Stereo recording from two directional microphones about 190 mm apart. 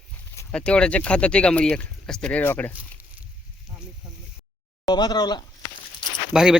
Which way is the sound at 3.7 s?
5° right (ahead or behind).